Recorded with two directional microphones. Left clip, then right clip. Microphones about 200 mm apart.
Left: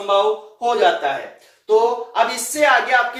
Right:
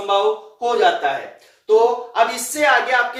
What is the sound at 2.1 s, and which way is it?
Speech, 15° left (ahead or behind).